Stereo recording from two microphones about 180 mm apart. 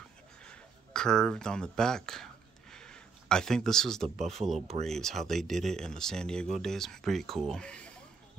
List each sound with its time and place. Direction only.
0.5 s a sound: 5° left (ahead or behind)
4.2 s speech: 35° right (ahead or behind)
4.8 s speech: centre (ahead or behind)